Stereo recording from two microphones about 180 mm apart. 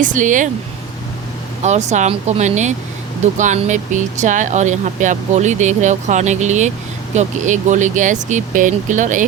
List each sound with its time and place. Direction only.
0.0 s speech: 45° right (ahead or behind)
1.6 s speech: 40° right (ahead or behind)